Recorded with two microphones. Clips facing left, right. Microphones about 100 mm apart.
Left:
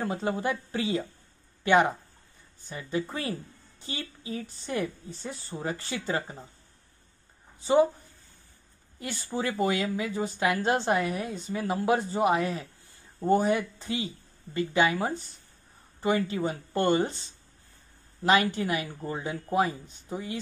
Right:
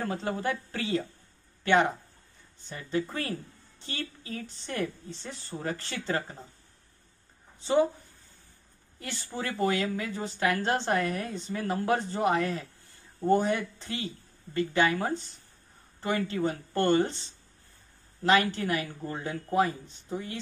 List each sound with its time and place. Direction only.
0.0 s speech: 15° left (ahead or behind)
9.0 s speech: 15° left (ahead or behind)
18.2 s speech: 15° left (ahead or behind)